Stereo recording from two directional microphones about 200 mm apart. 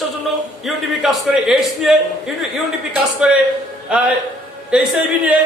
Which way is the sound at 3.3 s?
5° right (ahead or behind).